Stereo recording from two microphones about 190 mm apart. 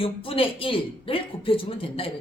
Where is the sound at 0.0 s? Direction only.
30° left (ahead or behind).